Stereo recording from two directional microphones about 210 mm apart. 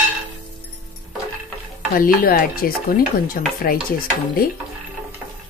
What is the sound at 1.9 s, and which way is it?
Speech, 45° left (ahead or behind).